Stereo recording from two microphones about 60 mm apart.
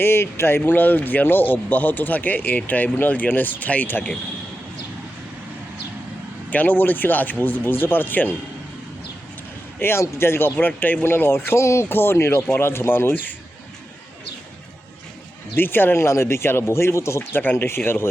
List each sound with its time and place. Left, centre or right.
0.0 s speech: left
6.5 s speech: left
9.8 s speech: left
10.6 s speech: left
15.5 s speech: left
17.4 s speech: left